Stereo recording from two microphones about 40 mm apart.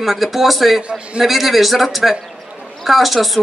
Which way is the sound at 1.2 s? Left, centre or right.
Centre.